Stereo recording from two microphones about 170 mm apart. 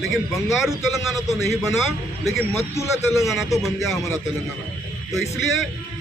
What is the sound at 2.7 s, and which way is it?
Speech, 15° left (ahead or behind).